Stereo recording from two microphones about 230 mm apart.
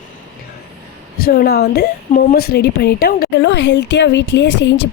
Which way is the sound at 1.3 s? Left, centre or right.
Left.